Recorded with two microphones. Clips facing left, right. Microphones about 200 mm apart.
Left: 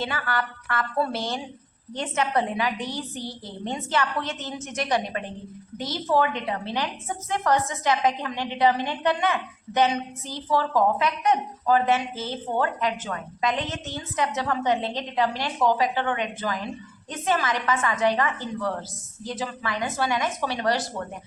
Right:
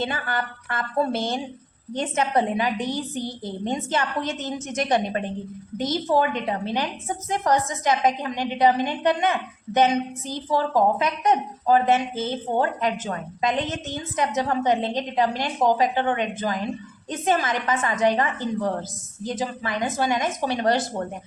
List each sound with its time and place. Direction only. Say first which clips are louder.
0.0 s a woman's voice: right 1 dB; 20° right (ahead or behind)